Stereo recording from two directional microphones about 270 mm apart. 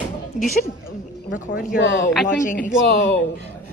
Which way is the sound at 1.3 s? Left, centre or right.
Left.